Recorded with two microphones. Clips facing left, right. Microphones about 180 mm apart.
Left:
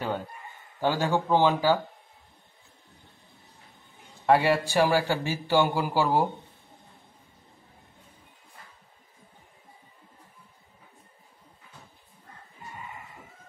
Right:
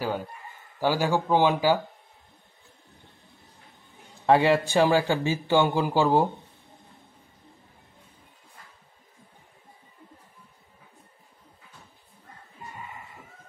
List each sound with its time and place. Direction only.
0.7 s speech: 10° right (ahead or behind)
4.3 s a man's voice: 20° right (ahead or behind)